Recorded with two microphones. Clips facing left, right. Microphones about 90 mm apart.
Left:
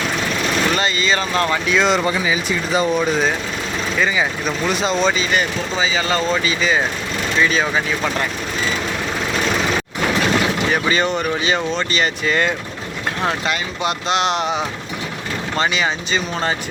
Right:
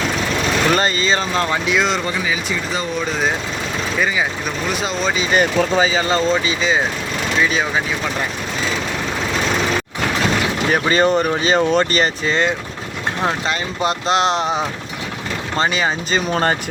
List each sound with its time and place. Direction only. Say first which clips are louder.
0.7 s speech: right 2 dB; 40° right (ahead or behind); by 1.8 s 20° right (ahead or behind)
1.8 s speech: left 3 dB; 5° left (ahead or behind)
3.9 s speech: left 1 dB; 5° right (ahead or behind)
5.3 s speech: right 5 dB; 45° right (ahead or behind)
6.0 s speech: right 2 dB; 25° right (ahead or behind)
10.7 s speech: right 7 dB; 40° right (ahead or behind)
12.2 s speech: even; 25° right (ahead or behind)
13.5 s speech: right 2 dB; 35° right (ahead or behind)
15.5 s speech: right 1 dB; 35° right (ahead or behind)